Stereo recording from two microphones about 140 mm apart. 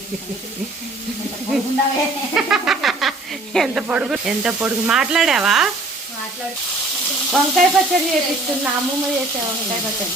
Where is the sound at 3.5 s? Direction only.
Centre (ahead or behind).